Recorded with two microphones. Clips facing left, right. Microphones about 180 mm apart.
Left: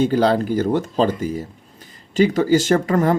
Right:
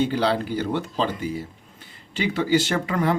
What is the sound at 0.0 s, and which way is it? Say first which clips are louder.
Speech: left 5 dB; 45° left (ahead or behind).